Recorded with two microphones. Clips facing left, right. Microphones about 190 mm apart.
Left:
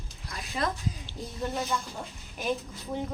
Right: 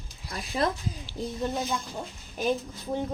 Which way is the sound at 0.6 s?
30° right (ahead or behind).